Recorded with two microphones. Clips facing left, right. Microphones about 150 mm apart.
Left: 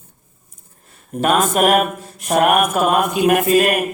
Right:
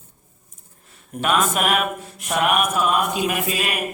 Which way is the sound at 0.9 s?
45° left (ahead or behind).